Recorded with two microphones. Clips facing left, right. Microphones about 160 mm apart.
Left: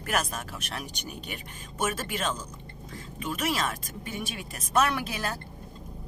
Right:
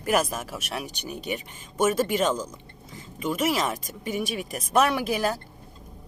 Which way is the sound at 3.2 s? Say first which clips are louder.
Right 5 dB; 10° right (ahead or behind).